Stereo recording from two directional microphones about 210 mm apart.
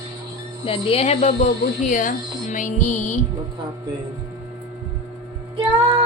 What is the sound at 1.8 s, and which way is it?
Music, 40° left (ahead or behind).